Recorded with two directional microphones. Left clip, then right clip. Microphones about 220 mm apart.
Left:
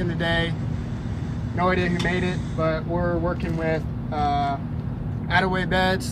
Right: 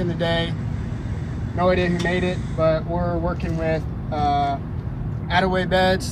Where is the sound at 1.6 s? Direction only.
10° right (ahead or behind).